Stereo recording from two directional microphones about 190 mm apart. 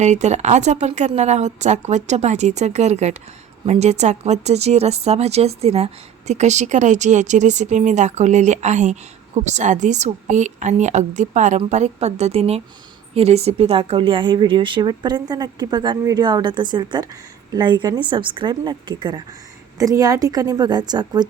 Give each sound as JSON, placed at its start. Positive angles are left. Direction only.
{"t": 0.0, "sound": "a woman's voice", "side_deg": -35}